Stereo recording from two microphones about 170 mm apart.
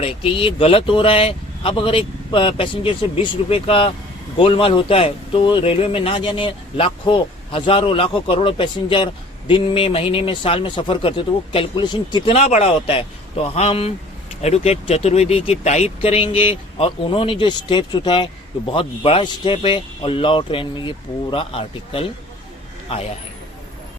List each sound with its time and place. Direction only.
0.0 s speech: 35° left (ahead or behind)
12.3 s speech: 40° left (ahead or behind)